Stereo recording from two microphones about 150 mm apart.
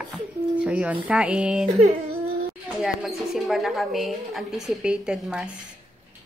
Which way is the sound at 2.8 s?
Centre (ahead or behind).